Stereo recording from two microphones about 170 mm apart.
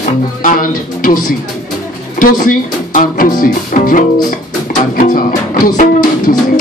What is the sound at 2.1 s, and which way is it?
Speech, 55° left (ahead or behind).